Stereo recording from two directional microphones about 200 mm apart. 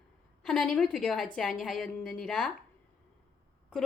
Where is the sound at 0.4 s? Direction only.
Centre (ahead or behind).